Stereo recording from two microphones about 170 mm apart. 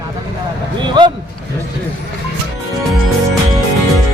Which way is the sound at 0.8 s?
25° right (ahead or behind).